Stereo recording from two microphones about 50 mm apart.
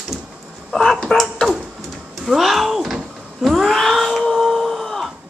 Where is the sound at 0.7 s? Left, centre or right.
Centre.